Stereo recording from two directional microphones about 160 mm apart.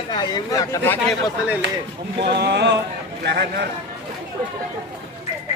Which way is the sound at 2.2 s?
85° right.